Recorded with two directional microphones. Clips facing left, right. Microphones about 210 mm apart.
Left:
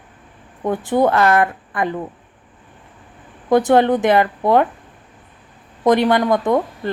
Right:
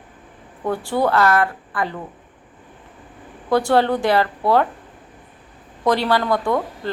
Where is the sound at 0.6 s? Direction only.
20° left (ahead or behind).